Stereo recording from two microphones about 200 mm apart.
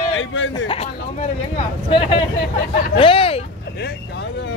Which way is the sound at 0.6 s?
30° left (ahead or behind).